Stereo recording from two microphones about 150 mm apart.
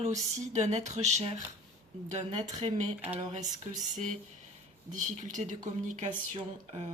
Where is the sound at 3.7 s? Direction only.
55° right (ahead or behind).